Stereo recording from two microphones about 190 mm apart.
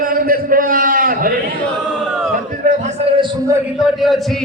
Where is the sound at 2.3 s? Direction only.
40° right (ahead or behind); by 3.6 s 20° right (ahead or behind).